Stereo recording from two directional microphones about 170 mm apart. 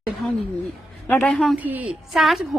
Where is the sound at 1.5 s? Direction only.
10° right (ahead or behind).